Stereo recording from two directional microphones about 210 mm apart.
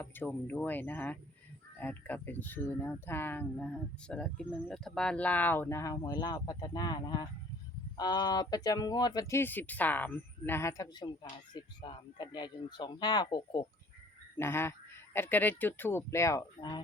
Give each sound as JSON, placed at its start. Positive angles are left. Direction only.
{"t": 0.0, "sound": "speech", "side_deg": 10}